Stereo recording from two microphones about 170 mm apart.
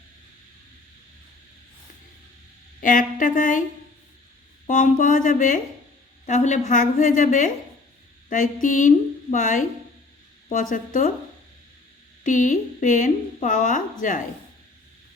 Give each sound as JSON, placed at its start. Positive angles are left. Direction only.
{"t": 2.8, "sound": "a woman's voice", "side_deg": 50}
{"t": 4.6, "sound": "a woman's voice", "side_deg": 50}
{"t": 12.2, "sound": "a woman's voice", "side_deg": 50}